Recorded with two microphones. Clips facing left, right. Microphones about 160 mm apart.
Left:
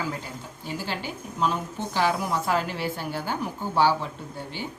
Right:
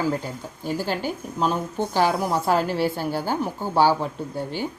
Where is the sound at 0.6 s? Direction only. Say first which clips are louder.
Right 7 dB; 45° right (ahead or behind).